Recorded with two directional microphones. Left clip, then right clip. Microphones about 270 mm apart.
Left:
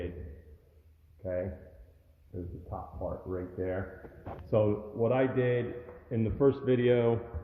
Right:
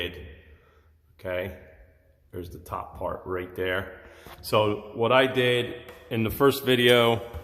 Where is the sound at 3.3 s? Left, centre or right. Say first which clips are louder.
Right 7 dB; right.